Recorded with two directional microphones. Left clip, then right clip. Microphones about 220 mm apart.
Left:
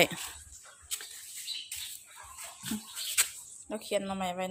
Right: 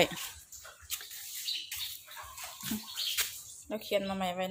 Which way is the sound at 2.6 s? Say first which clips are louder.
Right 3 dB; 15° left (ahead or behind).